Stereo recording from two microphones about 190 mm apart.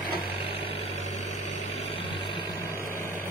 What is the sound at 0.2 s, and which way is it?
Vehicle, 30° left (ahead or behind).